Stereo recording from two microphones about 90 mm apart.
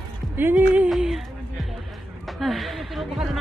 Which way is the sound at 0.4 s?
20° right (ahead or behind).